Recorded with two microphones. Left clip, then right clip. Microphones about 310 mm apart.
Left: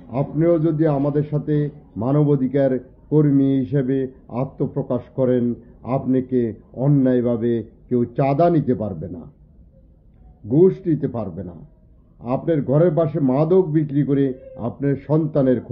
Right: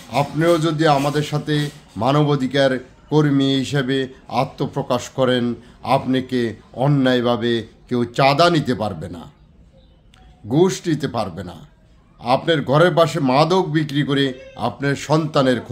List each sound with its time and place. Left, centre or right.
0.1 s a man's voice: centre
10.6 s a man's voice: centre